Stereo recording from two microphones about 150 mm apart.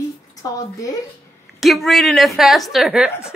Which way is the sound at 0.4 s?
20° left (ahead or behind).